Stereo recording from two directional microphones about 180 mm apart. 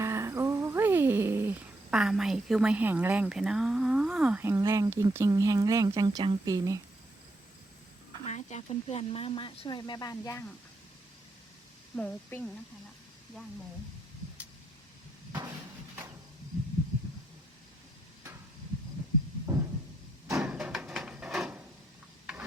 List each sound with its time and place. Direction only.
0.0 s music: 15° right (ahead or behind)
8.2 s speech: 40° left (ahead or behind); by 10.4 s 20° left (ahead or behind)
11.9 s a woman's voice: 10° left (ahead or behind)
20.4 s a sound: 5° right (ahead or behind)
22.3 s rub: 5° right (ahead or behind)